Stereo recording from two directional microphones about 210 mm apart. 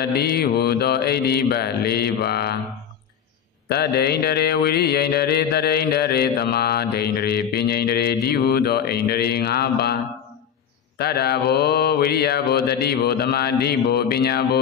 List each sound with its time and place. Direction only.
0.1 s mantra: 50° left (ahead or behind)
3.6 s mantra: 50° left (ahead or behind)
11.0 s mantra: 50° left (ahead or behind)